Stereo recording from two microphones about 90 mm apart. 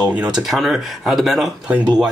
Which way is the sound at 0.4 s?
Centre (ahead or behind).